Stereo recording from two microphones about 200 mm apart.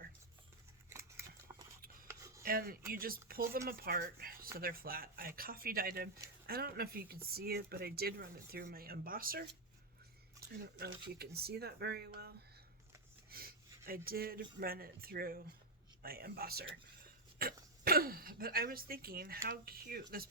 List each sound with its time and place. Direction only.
0.9 s scissors: 15° right (ahead or behind)
2.0 s a sound: 15° right (ahead or behind)
2.4 s speech: 50° right (ahead or behind)
10.6 s speech: 50° right (ahead or behind)
13.3 s speech: 50° right (ahead or behind)